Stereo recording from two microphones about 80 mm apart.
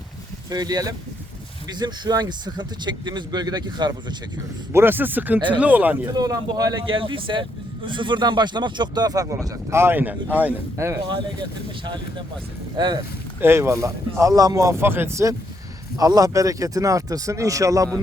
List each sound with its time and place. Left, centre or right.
0.5 s speech: right
4.7 s speech: right
6.1 s speech: right
6.8 s speech: right
9.3 s speech: right
9.7 s speech: right
10.8 s speech: right
12.7 s speech: right
13.4 s speech: right
16.0 s speech: right